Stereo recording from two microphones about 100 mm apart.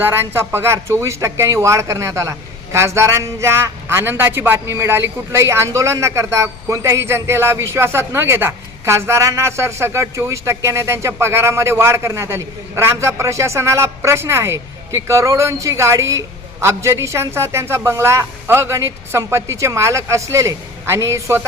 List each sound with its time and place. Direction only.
0.0 s a man's voice: 25° right (ahead or behind)